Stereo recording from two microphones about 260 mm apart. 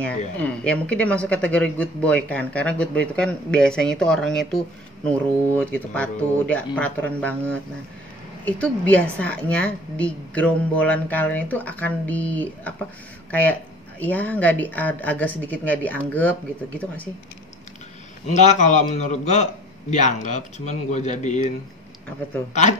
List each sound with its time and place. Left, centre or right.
0.4 s speech: centre
18.2 s a man's voice: left
22.5 s a man's voice: left